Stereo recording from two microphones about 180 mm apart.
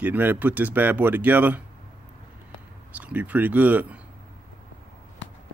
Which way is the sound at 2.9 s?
10° right (ahead or behind).